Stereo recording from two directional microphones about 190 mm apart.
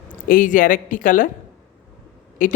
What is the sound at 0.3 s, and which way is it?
A woman's voice, 45° left (ahead or behind).